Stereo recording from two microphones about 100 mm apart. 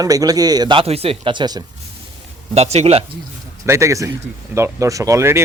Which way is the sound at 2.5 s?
90° right.